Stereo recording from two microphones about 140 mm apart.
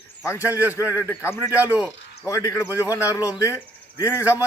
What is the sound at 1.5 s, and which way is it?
Speech, 10° right (ahead or behind).